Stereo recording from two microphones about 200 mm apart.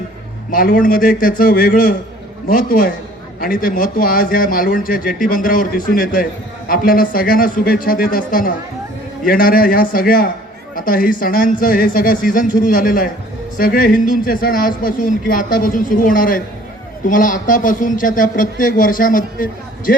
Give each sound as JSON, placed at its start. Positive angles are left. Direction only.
{"t": 0.5, "sound": "speech", "side_deg": 45}